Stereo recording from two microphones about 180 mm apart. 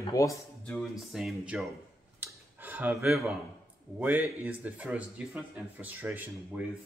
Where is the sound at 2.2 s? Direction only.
10° right (ahead or behind).